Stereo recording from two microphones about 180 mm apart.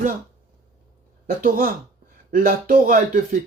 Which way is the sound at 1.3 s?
50° right (ahead or behind).